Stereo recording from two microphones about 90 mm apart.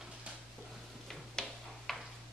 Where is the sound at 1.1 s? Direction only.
5° left (ahead or behind).